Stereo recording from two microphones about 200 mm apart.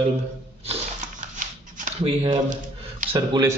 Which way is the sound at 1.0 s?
35° right (ahead or behind).